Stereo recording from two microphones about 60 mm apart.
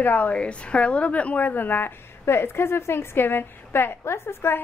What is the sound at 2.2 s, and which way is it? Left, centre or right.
A woman's voice, left.